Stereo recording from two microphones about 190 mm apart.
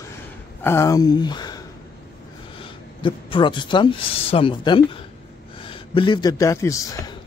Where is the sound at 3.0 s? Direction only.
25° left (ahead or behind).